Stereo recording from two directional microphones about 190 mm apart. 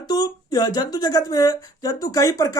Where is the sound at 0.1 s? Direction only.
20° left (ahead or behind).